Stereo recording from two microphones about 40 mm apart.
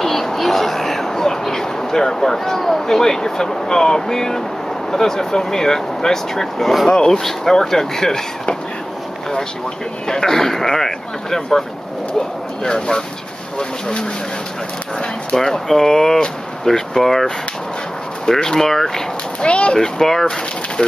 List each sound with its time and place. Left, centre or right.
0.0 s a sound: centre
4.9 s speech: centre
10.0 s speech: centre
15.3 s speech: centre
19.4 s speech: left
19.8 s speech: centre